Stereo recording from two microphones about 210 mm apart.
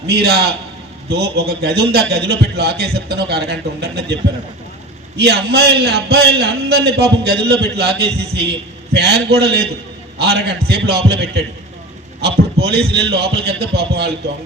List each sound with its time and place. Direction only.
0.1 s a man's voice: 50° right (ahead or behind)